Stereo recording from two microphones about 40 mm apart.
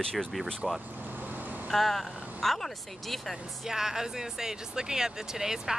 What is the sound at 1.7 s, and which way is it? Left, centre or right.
Speech, centre.